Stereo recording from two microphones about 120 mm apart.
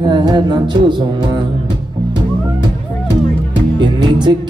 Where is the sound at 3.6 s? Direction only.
40° right (ahead or behind).